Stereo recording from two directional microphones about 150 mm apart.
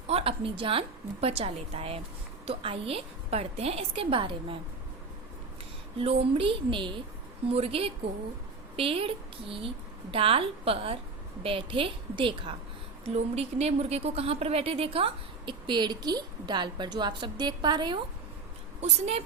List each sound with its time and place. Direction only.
0.1 s a woman's voice: 40° right (ahead or behind)
6.0 s a woman's voice: 35° right (ahead or behind)
18.8 s a woman's voice: 45° right (ahead or behind)